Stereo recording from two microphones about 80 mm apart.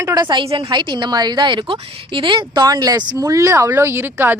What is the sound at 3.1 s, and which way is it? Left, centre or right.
Speech, right.